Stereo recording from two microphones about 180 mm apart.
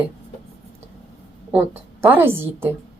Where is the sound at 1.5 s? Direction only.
10° right (ahead or behind).